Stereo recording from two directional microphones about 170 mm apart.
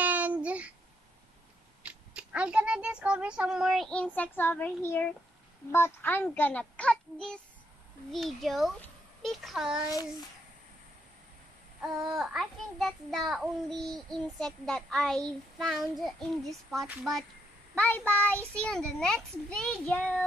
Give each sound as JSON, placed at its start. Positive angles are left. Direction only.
{"t": 0.0, "sound": "child singing", "side_deg": -10}
{"t": 1.9, "sound": "a child's voice", "side_deg": -5}
{"t": 12.1, "sound": "speech", "side_deg": 0}
{"t": 17.7, "sound": "a child's voice", "side_deg": 10}